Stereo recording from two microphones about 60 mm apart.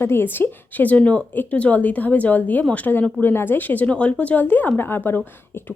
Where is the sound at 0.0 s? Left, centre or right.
Left.